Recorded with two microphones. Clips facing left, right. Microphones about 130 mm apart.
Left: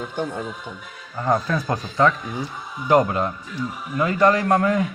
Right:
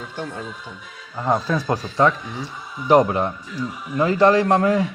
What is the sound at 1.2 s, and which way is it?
A man's voice, 20° right (ahead or behind).